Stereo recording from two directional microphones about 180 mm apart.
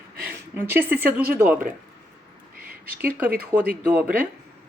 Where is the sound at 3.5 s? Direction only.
20° right (ahead or behind).